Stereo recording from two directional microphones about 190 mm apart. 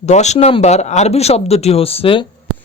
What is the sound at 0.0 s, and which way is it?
Speech, 35° left (ahead or behind).